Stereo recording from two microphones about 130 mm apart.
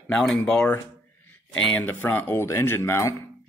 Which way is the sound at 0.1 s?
5° left (ahead or behind).